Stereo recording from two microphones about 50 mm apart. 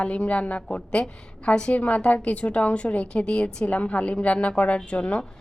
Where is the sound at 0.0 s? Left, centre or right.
Left.